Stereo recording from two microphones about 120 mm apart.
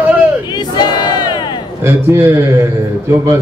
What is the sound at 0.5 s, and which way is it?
Battle cry, 35° left (ahead or behind).